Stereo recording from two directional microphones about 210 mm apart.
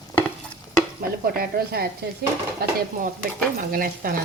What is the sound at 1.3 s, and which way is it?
Speech, 45° right (ahead or behind).